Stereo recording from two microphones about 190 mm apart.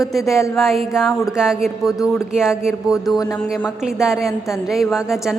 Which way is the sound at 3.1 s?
20° left (ahead or behind).